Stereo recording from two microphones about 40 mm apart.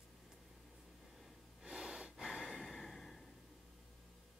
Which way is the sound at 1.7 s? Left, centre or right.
Centre.